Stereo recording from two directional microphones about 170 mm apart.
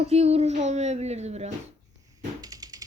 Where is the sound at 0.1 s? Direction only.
35° right (ahead or behind).